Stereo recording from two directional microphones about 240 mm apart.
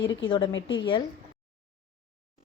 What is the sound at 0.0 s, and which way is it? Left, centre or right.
Speech, left.